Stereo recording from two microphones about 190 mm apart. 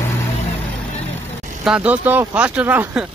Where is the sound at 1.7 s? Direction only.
10° right (ahead or behind).